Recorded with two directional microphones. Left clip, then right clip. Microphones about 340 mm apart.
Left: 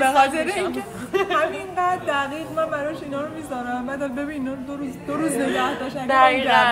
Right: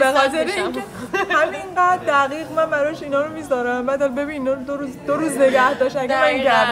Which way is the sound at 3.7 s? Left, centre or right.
Centre.